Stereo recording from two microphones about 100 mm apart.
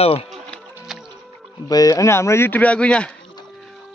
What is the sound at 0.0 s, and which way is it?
Speech, 75° left (ahead or behind).